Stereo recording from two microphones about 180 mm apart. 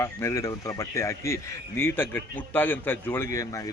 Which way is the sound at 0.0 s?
15° left (ahead or behind).